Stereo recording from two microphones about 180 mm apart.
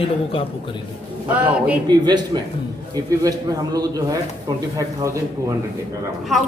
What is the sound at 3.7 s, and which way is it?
Speech, 20° right (ahead or behind).